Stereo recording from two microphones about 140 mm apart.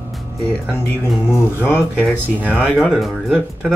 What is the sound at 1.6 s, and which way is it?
Speech, 15° left (ahead or behind).